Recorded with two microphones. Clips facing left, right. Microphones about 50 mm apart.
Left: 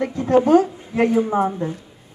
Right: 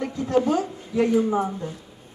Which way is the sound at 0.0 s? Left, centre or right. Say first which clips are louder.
Left 5 dB; left.